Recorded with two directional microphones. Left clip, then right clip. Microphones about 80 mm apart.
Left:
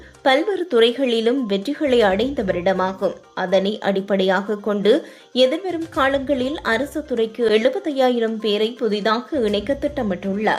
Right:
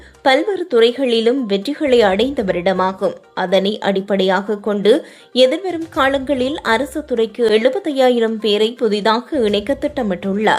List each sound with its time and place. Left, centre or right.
0.3 s a woman's voice: right